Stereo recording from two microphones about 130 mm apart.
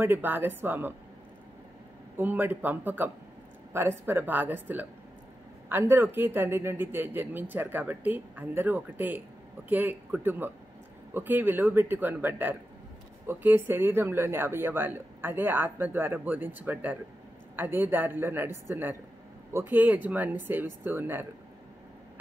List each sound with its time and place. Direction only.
0.0 s a man's voice: 15° right (ahead or behind)
2.1 s a man's voice: 15° right (ahead or behind)